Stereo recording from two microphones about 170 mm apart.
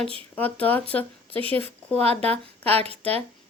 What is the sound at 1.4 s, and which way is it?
Speech, 35° right (ahead or behind).